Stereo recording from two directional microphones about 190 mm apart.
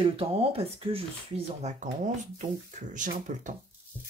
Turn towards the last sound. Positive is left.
turn(degrees=-40)  # may be behind; listen again after turning